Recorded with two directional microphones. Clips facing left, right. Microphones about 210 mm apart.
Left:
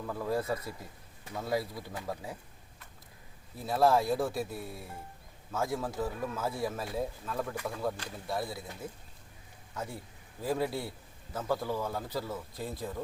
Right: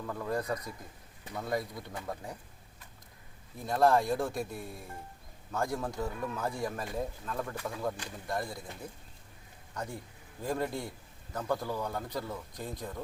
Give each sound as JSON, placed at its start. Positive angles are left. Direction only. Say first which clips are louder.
{"t": 0.0, "sound": "speech", "louder": "left 2 dB", "side_deg": 5}
{"t": 3.6, "sound": "a man's voice", "louder": "even", "side_deg": 5}